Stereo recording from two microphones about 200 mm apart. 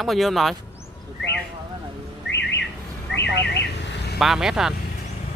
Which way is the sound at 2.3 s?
60° left (ahead or behind).